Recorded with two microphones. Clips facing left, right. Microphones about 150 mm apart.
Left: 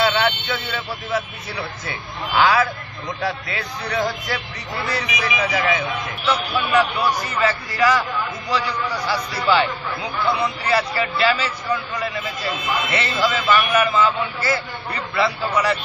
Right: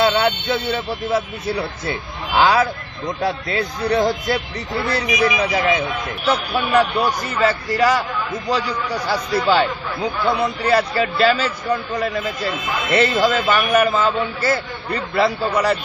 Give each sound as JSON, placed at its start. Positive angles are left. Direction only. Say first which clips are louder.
{"t": 0.0, "sound": "speech", "louder": "right 3 dB", "side_deg": -35}
{"t": 1.0, "sound": "a man's voice", "louder": "right 6 dB", "side_deg": -50}
{"t": 1.9, "sound": "speech", "louder": "right 3 dB", "side_deg": -25}
{"t": 4.0, "sound": "speech", "louder": "right 5 dB", "side_deg": -20}
{"t": 4.7, "sound": "a man's voice", "louder": "right 6 dB", "side_deg": -45}
{"t": 5.4, "sound": "speech", "louder": "right 3 dB", "side_deg": -25}
{"t": 5.9, "sound": "a man's voice", "louder": "right 2 dB", "side_deg": -50}